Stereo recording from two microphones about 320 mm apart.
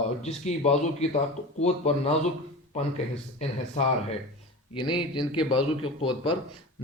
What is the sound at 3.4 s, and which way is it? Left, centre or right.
Speech, centre.